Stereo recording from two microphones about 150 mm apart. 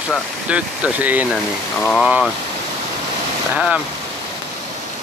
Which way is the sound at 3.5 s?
10° right (ahead or behind).